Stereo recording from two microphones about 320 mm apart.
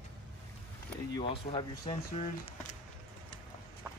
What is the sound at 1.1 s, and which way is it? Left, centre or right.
Speech, centre.